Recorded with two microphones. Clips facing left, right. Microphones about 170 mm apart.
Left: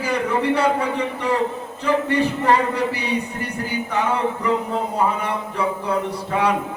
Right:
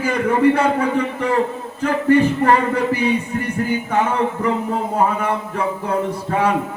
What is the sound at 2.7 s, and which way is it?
Speech, 50° right (ahead or behind).